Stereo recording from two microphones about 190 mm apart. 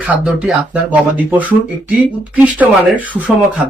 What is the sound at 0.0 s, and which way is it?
Speech, 5° right (ahead or behind).